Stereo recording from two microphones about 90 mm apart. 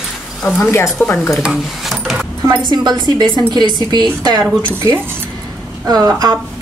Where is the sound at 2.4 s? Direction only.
50° right (ahead or behind).